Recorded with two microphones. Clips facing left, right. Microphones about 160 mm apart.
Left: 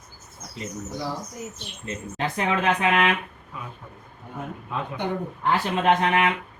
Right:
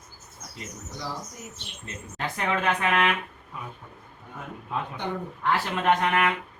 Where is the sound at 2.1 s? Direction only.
20° left (ahead or behind).